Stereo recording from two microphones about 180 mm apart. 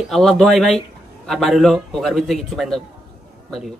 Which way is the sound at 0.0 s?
Centre (ahead or behind).